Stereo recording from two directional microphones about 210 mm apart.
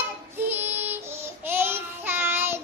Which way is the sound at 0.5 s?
10° right (ahead or behind).